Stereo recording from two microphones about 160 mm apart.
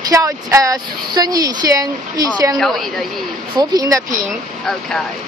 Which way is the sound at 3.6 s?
25° right (ahead or behind).